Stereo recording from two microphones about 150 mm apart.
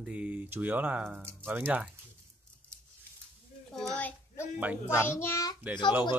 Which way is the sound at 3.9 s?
10° left (ahead or behind).